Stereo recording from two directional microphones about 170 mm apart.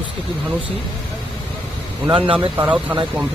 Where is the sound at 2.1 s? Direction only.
30° right (ahead or behind).